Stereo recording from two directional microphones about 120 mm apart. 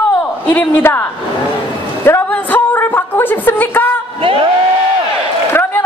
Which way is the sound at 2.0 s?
20° left (ahead or behind).